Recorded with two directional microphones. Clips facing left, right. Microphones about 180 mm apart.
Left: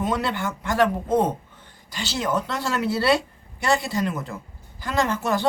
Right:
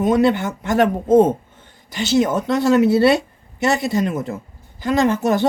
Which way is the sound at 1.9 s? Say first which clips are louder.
Right 8 dB; 20° right (ahead or behind).